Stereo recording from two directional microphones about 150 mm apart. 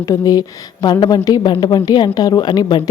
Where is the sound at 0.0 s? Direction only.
25° left (ahead or behind).